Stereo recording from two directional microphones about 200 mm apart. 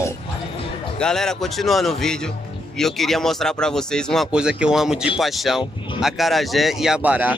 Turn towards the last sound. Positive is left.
turn(degrees=-5)  # may be behind; listen again after turning